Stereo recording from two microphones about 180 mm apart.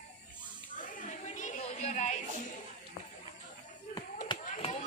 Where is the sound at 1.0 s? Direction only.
40° left (ahead or behind).